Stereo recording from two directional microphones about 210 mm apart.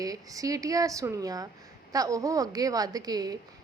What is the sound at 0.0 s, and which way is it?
A woman's voice, 15° right (ahead or behind).